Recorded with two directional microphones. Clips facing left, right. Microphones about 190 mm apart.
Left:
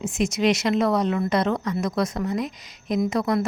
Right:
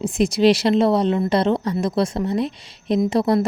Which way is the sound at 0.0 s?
35° right (ahead or behind).